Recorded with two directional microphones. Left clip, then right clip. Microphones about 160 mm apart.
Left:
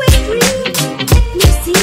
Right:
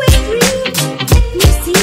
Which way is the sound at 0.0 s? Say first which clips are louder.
Even; centre (ahead or behind).